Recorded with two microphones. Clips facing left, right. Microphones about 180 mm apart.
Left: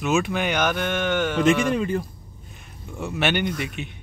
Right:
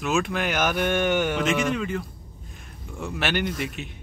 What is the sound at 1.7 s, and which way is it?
Speech, 35° left (ahead or behind).